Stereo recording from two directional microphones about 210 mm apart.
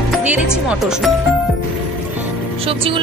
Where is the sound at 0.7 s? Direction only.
5° right (ahead or behind).